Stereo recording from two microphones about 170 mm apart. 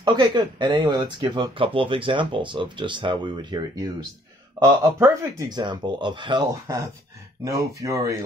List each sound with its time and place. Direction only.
0.0 s speech: 25° right (ahead or behind)
4.9 s speech: 20° right (ahead or behind)